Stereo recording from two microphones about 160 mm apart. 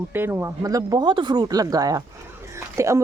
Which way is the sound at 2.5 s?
20° right (ahead or behind).